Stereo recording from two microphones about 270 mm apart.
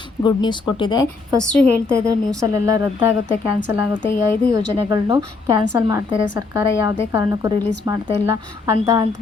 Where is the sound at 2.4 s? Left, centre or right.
Centre.